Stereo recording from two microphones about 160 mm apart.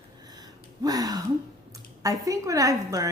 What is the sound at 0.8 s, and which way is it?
A woman's voice, 25° right (ahead or behind).